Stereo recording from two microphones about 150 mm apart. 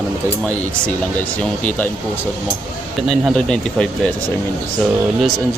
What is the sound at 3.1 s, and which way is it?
Speech, centre (ahead or behind).